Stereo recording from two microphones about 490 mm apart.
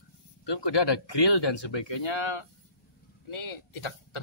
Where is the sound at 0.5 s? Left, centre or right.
Left.